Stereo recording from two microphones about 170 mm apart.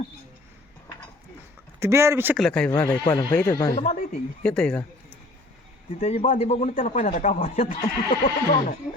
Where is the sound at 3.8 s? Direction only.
45° left (ahead or behind).